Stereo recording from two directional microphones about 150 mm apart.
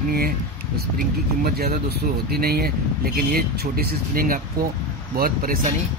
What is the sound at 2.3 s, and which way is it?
Speech, 90° right.